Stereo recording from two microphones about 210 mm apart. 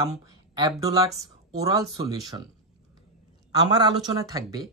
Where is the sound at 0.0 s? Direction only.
15° right (ahead or behind).